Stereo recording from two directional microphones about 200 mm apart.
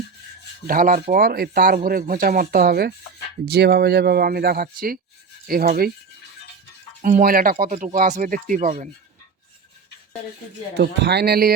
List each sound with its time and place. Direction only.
0.7 s speech: 45° right (ahead or behind)
7.0 s speech: 45° right (ahead or behind)
10.8 s speech: 60° right (ahead or behind)